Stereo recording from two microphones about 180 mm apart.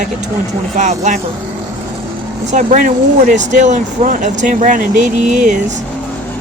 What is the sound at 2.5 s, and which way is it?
Speech, 45° right (ahead or behind).